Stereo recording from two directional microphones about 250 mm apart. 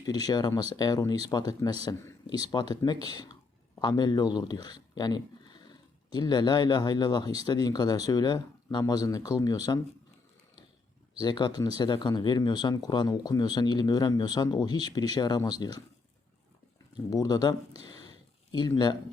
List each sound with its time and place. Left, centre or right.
0.0 s speech: centre
11.2 s speech: centre
17.1 s speech: centre